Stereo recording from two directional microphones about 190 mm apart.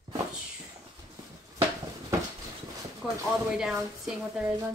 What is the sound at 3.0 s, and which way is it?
A woman's voice, 5° right (ahead or behind).